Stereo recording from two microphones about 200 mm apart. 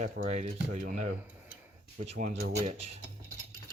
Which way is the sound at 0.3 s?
40° right (ahead or behind).